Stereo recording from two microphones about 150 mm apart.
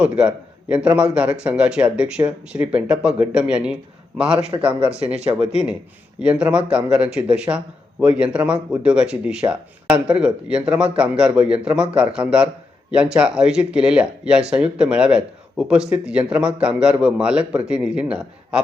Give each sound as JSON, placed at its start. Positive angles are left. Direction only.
{"t": 0.0, "sound": "speech", "side_deg": -5}
{"t": 6.1, "sound": "speech", "side_deg": -5}